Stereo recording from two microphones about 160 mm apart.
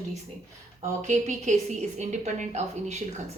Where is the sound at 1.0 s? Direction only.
45° right (ahead or behind).